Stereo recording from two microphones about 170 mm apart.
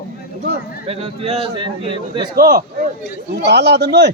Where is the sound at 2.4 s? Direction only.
65° right (ahead or behind).